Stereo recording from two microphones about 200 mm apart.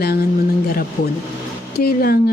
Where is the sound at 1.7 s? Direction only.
50° left (ahead or behind).